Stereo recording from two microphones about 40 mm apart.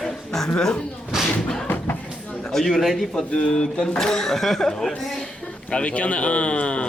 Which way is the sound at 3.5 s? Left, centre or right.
Centre.